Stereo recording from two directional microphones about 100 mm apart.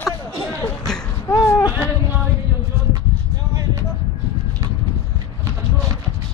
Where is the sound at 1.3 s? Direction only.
35° left (ahead or behind).